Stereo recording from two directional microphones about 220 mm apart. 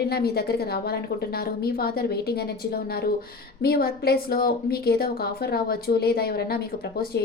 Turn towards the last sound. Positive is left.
turn(degrees=45)  # may be behind; listen again after turning